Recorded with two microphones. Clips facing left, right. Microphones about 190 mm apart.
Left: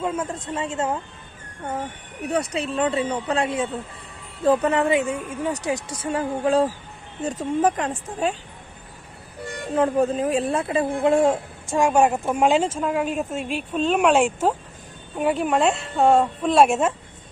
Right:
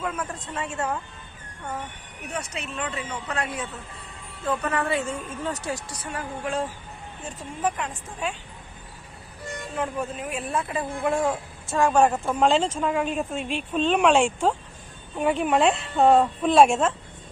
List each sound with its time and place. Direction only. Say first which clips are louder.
0.0 s a woman's voice: left 5 dB; 25° left (ahead or behind)
2.2 s a woman's voice: left 9 dB; 35° left (ahead or behind)
9.7 s a woman's voice: left 10 dB; 35° left (ahead or behind)
11.7 s a woman's voice: left 2 dB; 15° left (ahead or behind)